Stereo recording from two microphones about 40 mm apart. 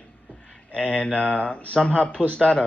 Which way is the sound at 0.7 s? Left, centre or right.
Left.